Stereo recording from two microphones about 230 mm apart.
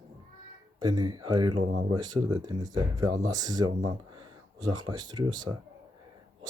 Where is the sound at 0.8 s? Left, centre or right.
Centre.